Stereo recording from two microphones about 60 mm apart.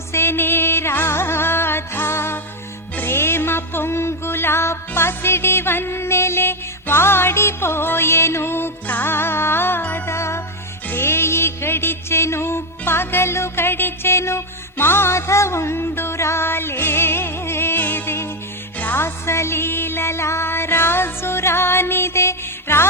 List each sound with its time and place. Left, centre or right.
0.1 s music: left
2.9 s music: left
3.2 s music: left
10.1 s music: left
10.8 s music: left
18.8 s music: left
19.0 s music: left